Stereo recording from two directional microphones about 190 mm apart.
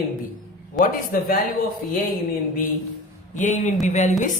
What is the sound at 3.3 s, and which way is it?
Speech, 40° left (ahead or behind).